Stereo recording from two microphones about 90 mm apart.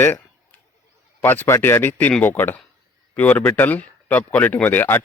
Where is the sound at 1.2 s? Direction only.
25° left (ahead or behind).